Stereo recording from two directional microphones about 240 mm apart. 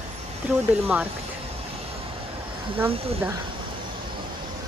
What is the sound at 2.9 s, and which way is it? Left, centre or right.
Speech, right.